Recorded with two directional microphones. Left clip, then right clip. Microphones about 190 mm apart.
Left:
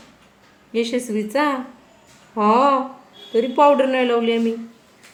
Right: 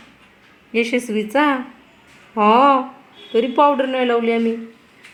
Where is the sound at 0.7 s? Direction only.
20° right (ahead or behind).